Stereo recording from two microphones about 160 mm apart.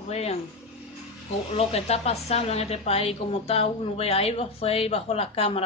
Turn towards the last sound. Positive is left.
turn(degrees=35)  # may be behind; listen again after turning